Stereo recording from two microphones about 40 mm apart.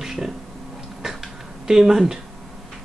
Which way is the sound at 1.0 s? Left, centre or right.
Centre.